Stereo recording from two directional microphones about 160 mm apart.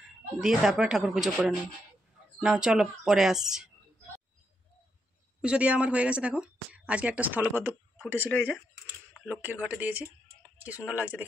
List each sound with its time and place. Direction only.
0.4 s speech: 5° right (ahead or behind)
5.4 s a woman's voice: 5° right (ahead or behind)
8.3 s speech: 10° left (ahead or behind)
9.2 s a woman's voice: 10° right (ahead or behind)